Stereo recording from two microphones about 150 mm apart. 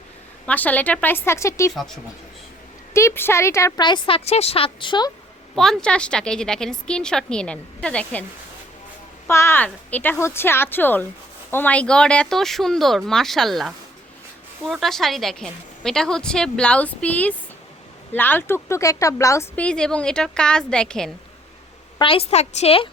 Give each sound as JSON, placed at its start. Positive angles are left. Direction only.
{"t": 0.4, "sound": "a woman's voice", "side_deg": 10}
{"t": 2.9, "sound": "a woman's voice", "side_deg": 15}
{"t": 3.8, "sound": "speech", "side_deg": 35}
{"t": 5.5, "sound": "a woman's voice", "side_deg": 5}
{"t": 9.2, "sound": "a woman's voice", "side_deg": 15}
{"t": 19.5, "sound": "a woman's voice", "side_deg": 5}
{"t": 21.9, "sound": "speech", "side_deg": 35}